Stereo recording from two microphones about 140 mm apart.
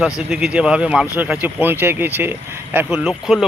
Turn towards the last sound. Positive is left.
turn(degrees=-5)  # may be behind; listen again after turning